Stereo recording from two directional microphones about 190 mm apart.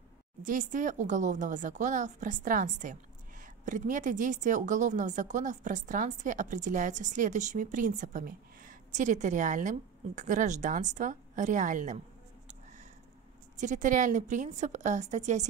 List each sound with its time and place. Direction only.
0.4 s speech: 45° right (ahead or behind)
13.6 s speech: 40° right (ahead or behind)